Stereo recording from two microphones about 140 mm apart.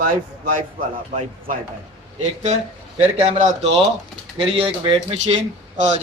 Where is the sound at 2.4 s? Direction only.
50° right (ahead or behind).